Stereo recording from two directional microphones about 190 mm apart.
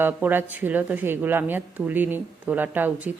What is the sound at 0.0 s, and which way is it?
Speech, 10° right (ahead or behind).